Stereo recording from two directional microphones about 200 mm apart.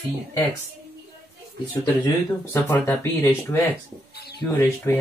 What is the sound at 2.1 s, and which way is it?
Speech, 15° left (ahead or behind).